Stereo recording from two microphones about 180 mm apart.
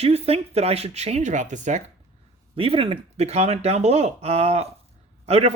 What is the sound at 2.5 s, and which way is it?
Speech, 30° right (ahead or behind).